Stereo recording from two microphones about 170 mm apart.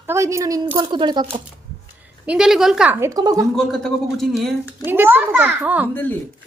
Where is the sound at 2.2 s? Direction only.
5° right (ahead or behind).